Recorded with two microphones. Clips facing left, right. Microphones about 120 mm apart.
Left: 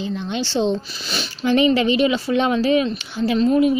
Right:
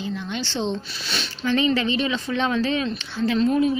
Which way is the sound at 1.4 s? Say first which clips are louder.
Left 5 dB; 15° left (ahead or behind).